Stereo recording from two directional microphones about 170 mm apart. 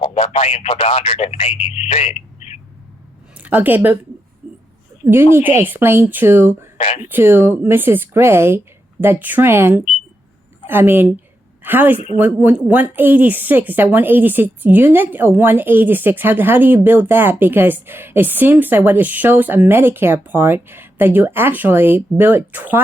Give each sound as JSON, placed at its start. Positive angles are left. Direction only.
{"t": 0.0, "sound": "speech", "side_deg": 35}
{"t": 3.3, "sound": "a woman's voice", "side_deg": -10}
{"t": 4.4, "sound": "a sound", "side_deg": -5}
{"t": 5.0, "sound": "a woman's voice", "side_deg": -15}
{"t": 6.7, "sound": "speech", "side_deg": 35}
{"t": 7.0, "sound": "a woman's voice", "side_deg": -10}
{"t": 11.9, "sound": "speech", "side_deg": 35}
{"t": 12.2, "sound": "a woman's voice", "side_deg": -10}